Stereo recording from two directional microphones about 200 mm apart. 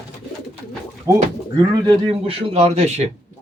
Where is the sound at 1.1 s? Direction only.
15° right (ahead or behind).